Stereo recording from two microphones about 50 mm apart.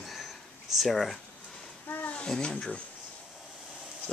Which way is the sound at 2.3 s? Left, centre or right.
Centre.